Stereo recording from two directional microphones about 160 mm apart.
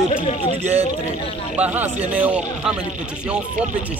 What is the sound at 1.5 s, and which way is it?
Speech, 10° right (ahead or behind).